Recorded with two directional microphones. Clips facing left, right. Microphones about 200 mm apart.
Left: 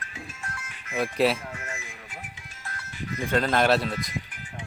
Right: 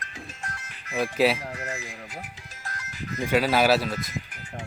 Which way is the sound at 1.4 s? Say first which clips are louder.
Right 4 dB; 35° right (ahead or behind).